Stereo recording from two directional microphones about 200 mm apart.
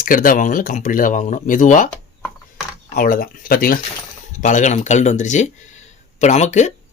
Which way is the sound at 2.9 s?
45° left (ahead or behind).